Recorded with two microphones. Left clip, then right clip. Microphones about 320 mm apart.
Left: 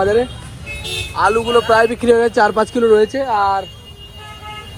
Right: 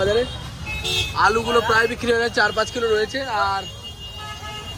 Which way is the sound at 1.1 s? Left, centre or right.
Centre.